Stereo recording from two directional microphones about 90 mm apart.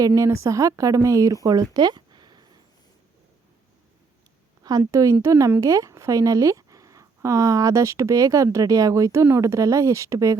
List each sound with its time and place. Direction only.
0.0 s speech: 40° right (ahead or behind); by 2.4 s 55° right (ahead or behind)
4.9 s a woman's voice: 35° right (ahead or behind)